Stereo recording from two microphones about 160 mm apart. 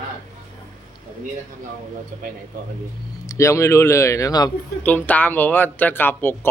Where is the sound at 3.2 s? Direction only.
20° left (ahead or behind).